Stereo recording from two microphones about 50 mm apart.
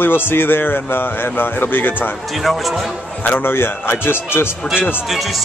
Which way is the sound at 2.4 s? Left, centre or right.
Centre.